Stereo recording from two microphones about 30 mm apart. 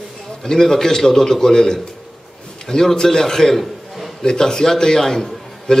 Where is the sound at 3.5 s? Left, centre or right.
Centre.